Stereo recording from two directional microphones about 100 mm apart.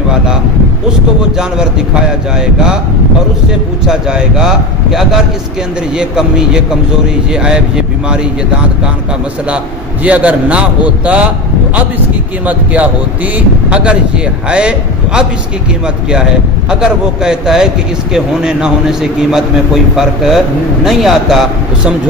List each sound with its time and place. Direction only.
1.6 s a man's voice: 10° right (ahead or behind)
3.8 s a man's voice: 5° right (ahead or behind)
10.0 s a man's voice: 15° right (ahead or behind)
12.4 s a man's voice: 15° right (ahead or behind)
16.8 s a man's voice: 5° right (ahead or behind)